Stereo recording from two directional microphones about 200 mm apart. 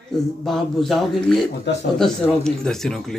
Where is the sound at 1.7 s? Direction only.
60° left (ahead or behind).